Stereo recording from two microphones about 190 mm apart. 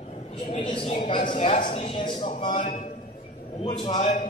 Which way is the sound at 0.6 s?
25° left (ahead or behind).